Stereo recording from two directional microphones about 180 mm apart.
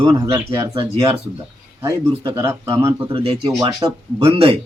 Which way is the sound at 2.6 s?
15° right (ahead or behind).